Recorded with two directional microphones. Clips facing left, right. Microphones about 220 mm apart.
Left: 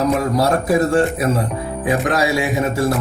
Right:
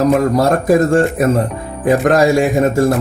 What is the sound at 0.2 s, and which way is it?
A man's voice, 45° right (ahead or behind).